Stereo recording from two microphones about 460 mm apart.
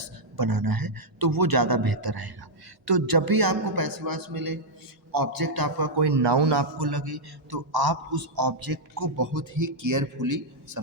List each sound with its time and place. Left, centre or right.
0.0 s a man's voice: right